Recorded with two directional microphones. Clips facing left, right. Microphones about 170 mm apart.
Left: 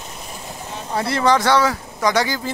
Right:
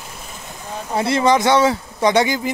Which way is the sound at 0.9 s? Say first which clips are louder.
Right 2 dB; 20° right (ahead or behind).